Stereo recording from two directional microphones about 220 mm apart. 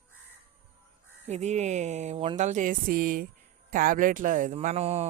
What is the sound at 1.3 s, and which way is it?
Speech, 30° right (ahead or behind).